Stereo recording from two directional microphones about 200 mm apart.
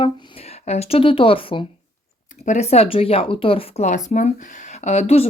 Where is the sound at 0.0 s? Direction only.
30° left (ahead or behind).